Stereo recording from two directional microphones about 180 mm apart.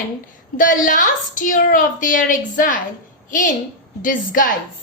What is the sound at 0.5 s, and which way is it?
A woman's voice, 45° left (ahead or behind).